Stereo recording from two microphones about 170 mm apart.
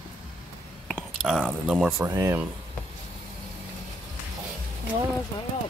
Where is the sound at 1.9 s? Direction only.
15° right (ahead or behind).